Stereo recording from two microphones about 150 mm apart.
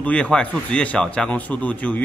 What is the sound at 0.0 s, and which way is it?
Speech, 10° left (ahead or behind).